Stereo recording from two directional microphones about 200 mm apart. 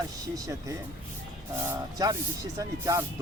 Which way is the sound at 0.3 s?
15° right (ahead or behind).